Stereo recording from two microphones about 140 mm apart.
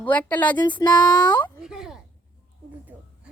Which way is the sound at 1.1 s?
30° left (ahead or behind).